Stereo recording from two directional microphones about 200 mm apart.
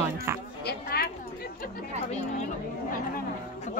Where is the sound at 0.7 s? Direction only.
50° left (ahead or behind).